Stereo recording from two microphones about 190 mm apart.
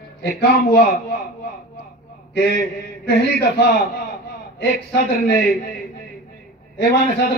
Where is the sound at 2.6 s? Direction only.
55° left (ahead or behind).